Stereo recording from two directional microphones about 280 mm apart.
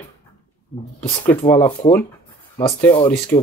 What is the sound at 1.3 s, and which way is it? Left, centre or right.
Speech, centre.